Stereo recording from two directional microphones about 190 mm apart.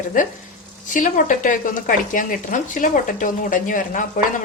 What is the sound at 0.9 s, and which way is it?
Speech, 45° left (ahead or behind).